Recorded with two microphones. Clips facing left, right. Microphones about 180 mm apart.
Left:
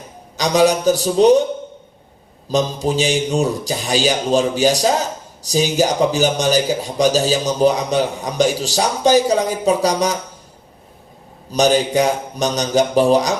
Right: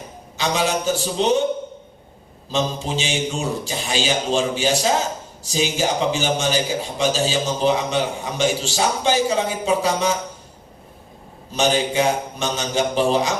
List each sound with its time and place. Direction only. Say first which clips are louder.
0.3 s a man's voice: left 7 dB; 40° left (ahead or behind)
2.5 s a man's voice: left 5 dB; 40° left (ahead or behind)
11.5 s a man's voice: left 4 dB; 40° left (ahead or behind)